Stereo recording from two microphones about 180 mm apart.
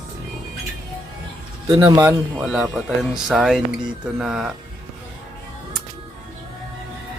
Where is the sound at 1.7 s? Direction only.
15° right (ahead or behind).